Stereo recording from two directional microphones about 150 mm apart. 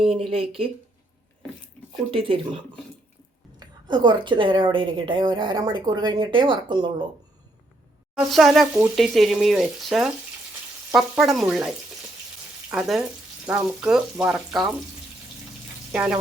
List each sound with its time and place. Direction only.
0.1 s a woman's voice: 40° right (ahead or behind)
2.0 s a woman's voice: 35° right (ahead or behind)
3.6 s a woman's voice: 30° right (ahead or behind)
8.3 s speech: centre (ahead or behind)
12.7 s speech: 5° right (ahead or behind)
15.9 s speech: 5° right (ahead or behind)